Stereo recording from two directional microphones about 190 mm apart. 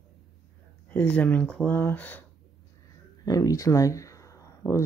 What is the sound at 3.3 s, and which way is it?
Speech, 20° left (ahead or behind).